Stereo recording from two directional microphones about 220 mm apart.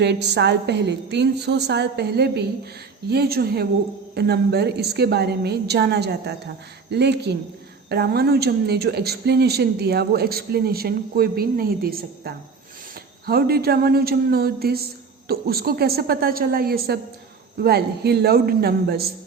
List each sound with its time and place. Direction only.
0.0 s speech: 50° right (ahead or behind)